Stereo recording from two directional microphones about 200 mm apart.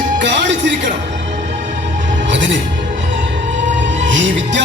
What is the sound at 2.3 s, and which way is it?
Music, 65° right (ahead or behind).